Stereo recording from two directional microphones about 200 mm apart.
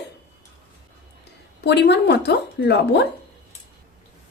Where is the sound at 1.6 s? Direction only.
55° left (ahead or behind).